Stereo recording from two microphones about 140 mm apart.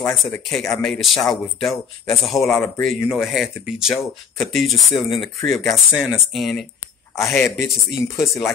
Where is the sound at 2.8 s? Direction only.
Centre (ahead or behind).